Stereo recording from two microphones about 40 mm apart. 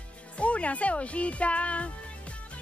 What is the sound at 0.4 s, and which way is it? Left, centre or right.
Speech, left.